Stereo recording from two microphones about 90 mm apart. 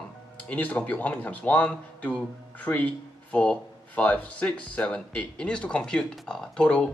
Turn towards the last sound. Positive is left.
turn(degrees=10)  # may be behind; listen again after turning